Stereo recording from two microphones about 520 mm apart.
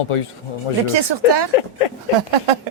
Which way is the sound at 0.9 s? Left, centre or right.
Right.